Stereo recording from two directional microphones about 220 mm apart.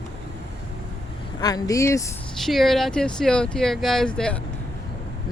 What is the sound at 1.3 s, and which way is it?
Speech, 15° left (ahead or behind).